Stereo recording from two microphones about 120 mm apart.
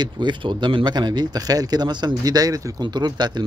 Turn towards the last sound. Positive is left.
turn(degrees=-35)  # may be behind; listen again after turning